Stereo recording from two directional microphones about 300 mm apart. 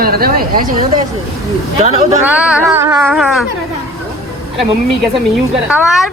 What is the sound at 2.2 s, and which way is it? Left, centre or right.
Speech, centre.